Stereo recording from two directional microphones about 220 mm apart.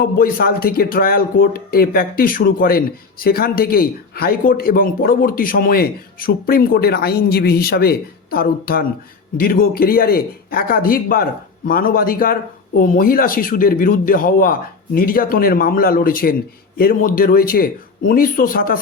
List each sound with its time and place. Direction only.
0.0 s a man's voice: 40° left (ahead or behind)